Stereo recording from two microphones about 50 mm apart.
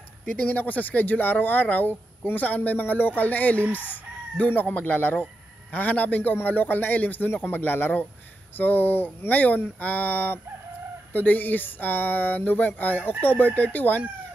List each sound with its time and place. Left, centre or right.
0.2 s speech: left
0.6 s speech: left